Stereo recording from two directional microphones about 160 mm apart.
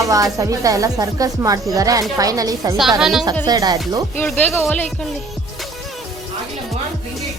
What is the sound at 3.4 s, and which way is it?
Speech, 25° right (ahead or behind).